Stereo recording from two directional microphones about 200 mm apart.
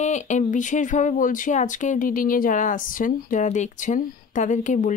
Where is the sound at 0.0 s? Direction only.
35° left (ahead or behind).